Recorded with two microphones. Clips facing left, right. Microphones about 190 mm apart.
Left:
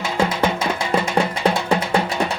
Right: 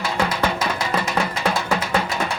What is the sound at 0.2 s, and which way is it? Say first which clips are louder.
Music: left 3 dB; 25° left (ahead or behind).